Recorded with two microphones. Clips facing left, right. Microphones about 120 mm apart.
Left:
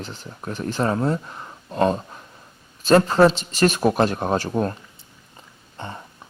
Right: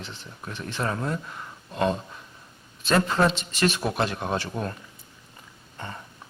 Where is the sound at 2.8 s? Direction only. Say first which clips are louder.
Left 7 dB; 40° left (ahead or behind).